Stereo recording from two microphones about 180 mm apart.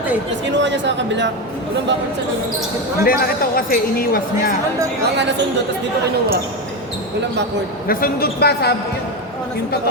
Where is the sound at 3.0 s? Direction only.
55° left (ahead or behind).